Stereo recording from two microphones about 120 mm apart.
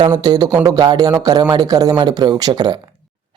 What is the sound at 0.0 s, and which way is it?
Speech, 35° right (ahead or behind).